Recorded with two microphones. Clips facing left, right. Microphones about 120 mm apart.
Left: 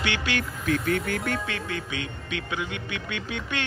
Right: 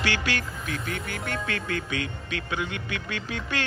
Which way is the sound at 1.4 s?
25° left (ahead or behind).